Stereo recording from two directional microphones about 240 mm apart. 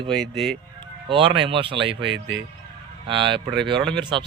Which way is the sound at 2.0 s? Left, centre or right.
Right.